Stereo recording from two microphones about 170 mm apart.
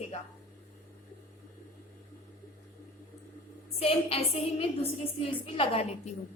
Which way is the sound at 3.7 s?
35° left (ahead or behind).